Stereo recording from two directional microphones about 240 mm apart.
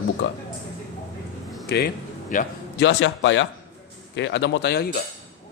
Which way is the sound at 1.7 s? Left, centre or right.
Left.